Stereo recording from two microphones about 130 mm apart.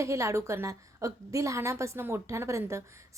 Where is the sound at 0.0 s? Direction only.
20° right (ahead or behind).